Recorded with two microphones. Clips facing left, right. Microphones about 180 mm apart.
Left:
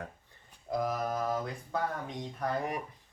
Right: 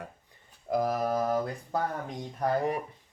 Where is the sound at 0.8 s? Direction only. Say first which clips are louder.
Right 4 dB; 35° right (ahead or behind).